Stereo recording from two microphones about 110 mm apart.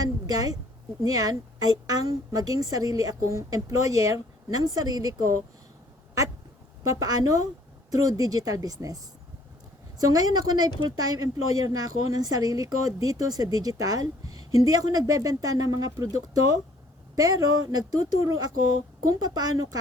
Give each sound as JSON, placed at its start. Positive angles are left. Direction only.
{"t": 0.0, "sound": "a sound", "side_deg": -35}
{"t": 1.0, "sound": "a woman's voice", "side_deg": -35}
{"t": 7.0, "sound": "a woman's voice", "side_deg": -35}
{"t": 10.1, "sound": "a woman's voice", "side_deg": -35}